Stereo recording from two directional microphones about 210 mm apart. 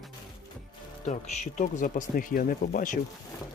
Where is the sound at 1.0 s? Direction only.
35° left (ahead or behind).